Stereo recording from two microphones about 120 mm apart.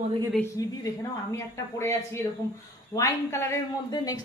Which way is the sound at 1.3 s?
25° left (ahead or behind).